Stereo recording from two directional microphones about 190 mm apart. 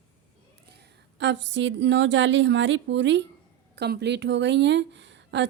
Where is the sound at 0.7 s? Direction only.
65° right (ahead or behind).